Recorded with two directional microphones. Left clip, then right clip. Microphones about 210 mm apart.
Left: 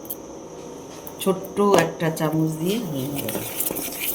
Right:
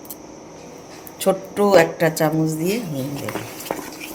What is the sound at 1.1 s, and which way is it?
Speech, 60° right (ahead or behind).